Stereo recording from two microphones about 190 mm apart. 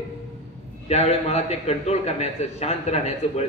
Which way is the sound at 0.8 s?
35° left (ahead or behind).